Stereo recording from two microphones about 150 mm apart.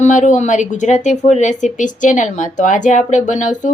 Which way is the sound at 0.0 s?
55° left (ahead or behind).